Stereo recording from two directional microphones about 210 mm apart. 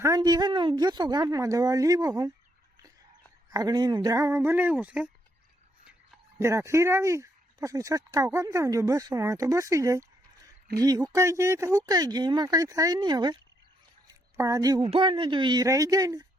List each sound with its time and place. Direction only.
0.0 s a woman's voice: 15° right (ahead or behind)
3.5 s a woman's voice: 15° right (ahead or behind)
6.4 s a woman's voice: 15° right (ahead or behind)
14.1 s a sound: 15° right (ahead or behind)
14.8 s speech: 25° right (ahead or behind)